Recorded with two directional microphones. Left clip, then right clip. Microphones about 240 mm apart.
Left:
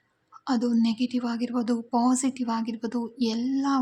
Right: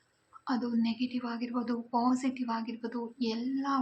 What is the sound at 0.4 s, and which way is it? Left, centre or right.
Speech, left.